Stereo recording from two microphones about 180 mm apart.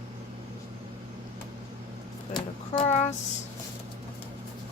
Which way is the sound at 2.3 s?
25° left (ahead or behind).